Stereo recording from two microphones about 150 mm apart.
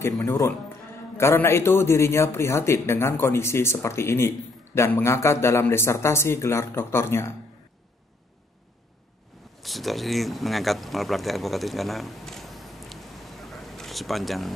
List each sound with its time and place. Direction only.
0.2 s speech: 20° left (ahead or behind)
9.6 s speech: centre (ahead or behind)